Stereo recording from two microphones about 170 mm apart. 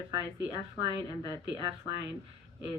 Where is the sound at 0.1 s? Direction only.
25° right (ahead or behind).